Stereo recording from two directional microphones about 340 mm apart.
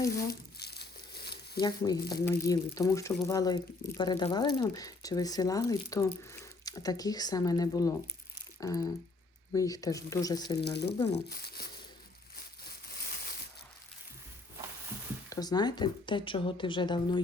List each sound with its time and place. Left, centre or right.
0.2 s crumpling: left
1.6 s speech: centre
10.6 s speech: left
15.3 s speech: centre